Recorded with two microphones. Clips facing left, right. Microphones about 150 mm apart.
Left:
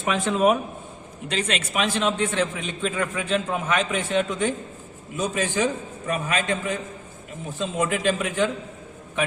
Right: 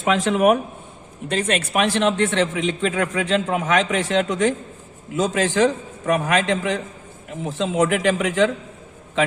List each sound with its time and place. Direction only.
0.0 s speech: 90° right; by 0.6 s 75° right (ahead or behind)
1.3 s a man's voice: 50° right (ahead or behind); by 8.4 s 85° right